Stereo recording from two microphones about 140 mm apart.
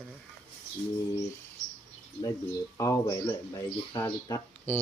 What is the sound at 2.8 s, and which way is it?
A man's voice, 20° left (ahead or behind).